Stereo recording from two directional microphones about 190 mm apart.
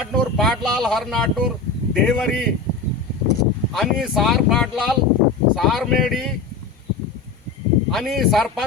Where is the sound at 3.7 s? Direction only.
Centre (ahead or behind).